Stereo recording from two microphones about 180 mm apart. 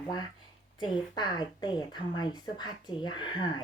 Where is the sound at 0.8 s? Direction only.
25° left (ahead or behind).